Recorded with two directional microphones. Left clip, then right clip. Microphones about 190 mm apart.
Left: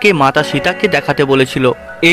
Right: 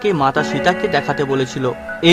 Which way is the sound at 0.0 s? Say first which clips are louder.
Left 6 dB; 20° left (ahead or behind).